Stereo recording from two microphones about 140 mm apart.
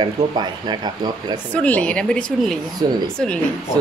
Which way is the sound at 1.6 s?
10° left (ahead or behind).